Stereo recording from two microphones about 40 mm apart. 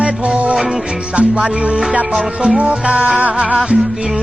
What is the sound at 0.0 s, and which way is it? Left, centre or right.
Music, right.